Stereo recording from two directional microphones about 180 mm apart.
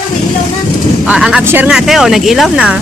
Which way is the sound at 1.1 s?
5° right (ahead or behind).